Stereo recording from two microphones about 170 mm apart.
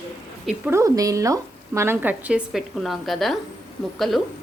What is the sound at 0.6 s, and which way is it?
Speech, 15° right (ahead or behind).